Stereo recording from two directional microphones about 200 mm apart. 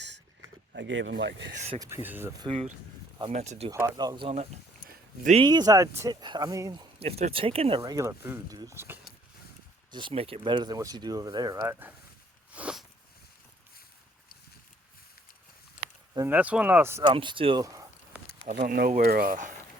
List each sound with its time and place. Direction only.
0.7 s speech: 65° right (ahead or behind)
1.8 s speech: 10° right (ahead or behind)
2.4 s speech: 30° right (ahead or behind)
3.7 s speech: 15° right (ahead or behind)
4.3 s speech: 35° right (ahead or behind)
5.4 s speech: 20° right (ahead or behind)
7.8 s speech: 15° right (ahead or behind)
9.9 s speech: 25° right (ahead or behind); by 11.9 s 10° right (ahead or behind)
12.5 s a sound: 5° right (ahead or behind)
16.1 s speech: 10° right (ahead or behind)
17.1 s speech: 25° right (ahead or behind)
18.6 s speech: 40° right (ahead or behind)